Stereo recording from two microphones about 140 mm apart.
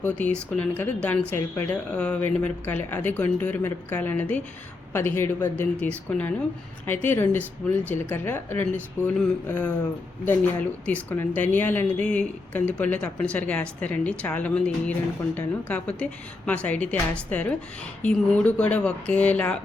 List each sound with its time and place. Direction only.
0.0 s a woman's voice: 10° left (ahead or behind)